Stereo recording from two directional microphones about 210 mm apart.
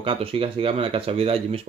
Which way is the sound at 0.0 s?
25° right (ahead or behind).